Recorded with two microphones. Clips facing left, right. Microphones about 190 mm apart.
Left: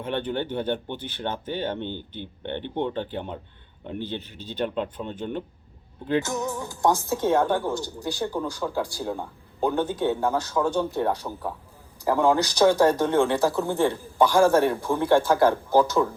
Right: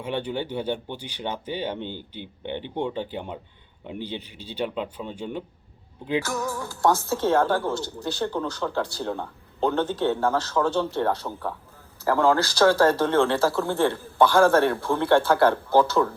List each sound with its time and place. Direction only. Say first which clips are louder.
0.0 s speech: left 1 dB; 10° right (ahead or behind)
6.2 s a woman's voice: even; 20° left (ahead or behind)